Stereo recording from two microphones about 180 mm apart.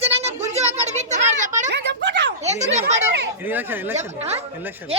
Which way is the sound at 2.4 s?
40° right (ahead or behind).